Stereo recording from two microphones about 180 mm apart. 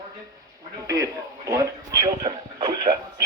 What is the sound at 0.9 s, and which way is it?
Speech, 20° right (ahead or behind).